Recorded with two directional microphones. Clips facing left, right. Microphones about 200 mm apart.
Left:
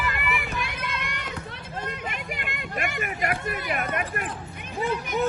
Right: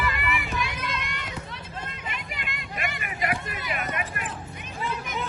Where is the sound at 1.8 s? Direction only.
55° left (ahead or behind).